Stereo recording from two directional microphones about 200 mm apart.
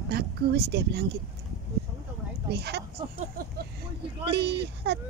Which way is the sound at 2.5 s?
55° right (ahead or behind).